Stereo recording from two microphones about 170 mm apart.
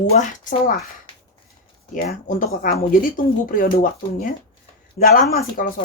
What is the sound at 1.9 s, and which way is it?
Speech, 55° left (ahead or behind).